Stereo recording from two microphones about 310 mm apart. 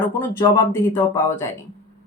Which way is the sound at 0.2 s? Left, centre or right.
Centre.